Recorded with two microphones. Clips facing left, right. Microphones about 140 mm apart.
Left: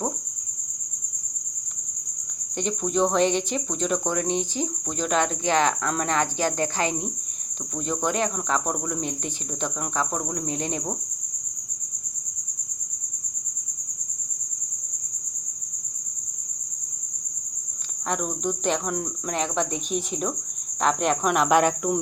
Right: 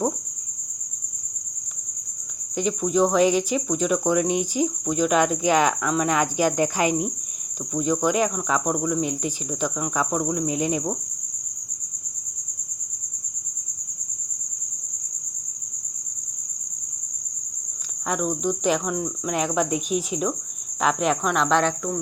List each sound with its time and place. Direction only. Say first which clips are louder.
2.6 s speech: right 3 dB; 5° right (ahead or behind)
18.1 s cricket: right 3 dB; centre (ahead or behind); by 22.0 s 15° left (ahead or behind)